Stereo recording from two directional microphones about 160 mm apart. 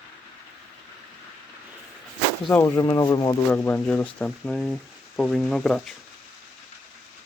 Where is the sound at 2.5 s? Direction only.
10° left (ahead or behind).